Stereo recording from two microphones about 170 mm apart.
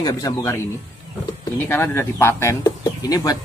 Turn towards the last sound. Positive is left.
turn(degrees=20)  # may be behind; listen again after turning